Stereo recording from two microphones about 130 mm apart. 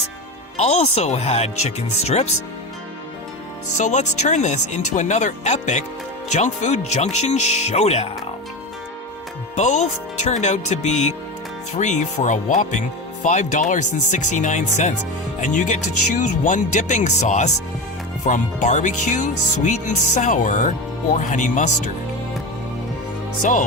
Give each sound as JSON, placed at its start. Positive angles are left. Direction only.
{"t": 0.5, "sound": "speech", "side_deg": 55}
{"t": 3.8, "sound": "speech", "side_deg": 65}
{"t": 9.6, "sound": "speech", "side_deg": 65}
{"t": 18.3, "sound": "speech", "side_deg": 75}
{"t": 23.4, "sound": "music", "side_deg": 80}